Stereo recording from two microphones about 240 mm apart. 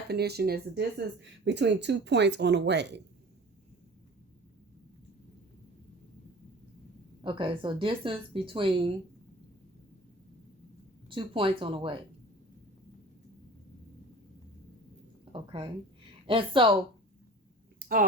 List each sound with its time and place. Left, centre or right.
0.1 s speech: right
7.2 s speech: centre
11.1 s speech: right
15.2 s speech: right
17.7 s a sound: right